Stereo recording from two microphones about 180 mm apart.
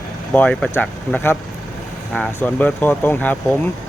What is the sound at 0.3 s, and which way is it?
Speech, 10° left (ahead or behind).